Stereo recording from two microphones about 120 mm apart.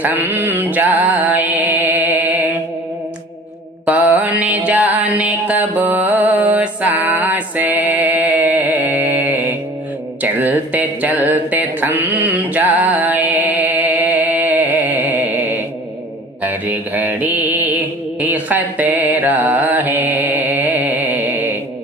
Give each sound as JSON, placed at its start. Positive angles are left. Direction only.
{"t": 0.0, "sound": "mantra", "side_deg": -15}
{"t": 3.8, "sound": "mantra", "side_deg": -15}
{"t": 10.2, "sound": "a sound", "side_deg": -15}
{"t": 16.4, "sound": "mantra", "side_deg": -15}